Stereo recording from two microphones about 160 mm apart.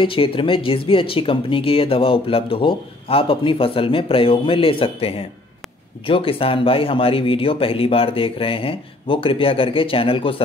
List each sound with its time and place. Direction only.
0.0 s speech: 35° left (ahead or behind)